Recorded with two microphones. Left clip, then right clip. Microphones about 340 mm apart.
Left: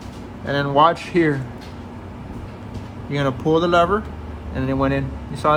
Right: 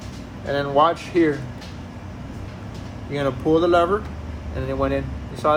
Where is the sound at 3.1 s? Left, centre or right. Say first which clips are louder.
Left 1 dB; centre.